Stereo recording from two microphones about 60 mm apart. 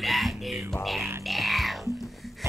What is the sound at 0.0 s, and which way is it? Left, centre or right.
Music, centre.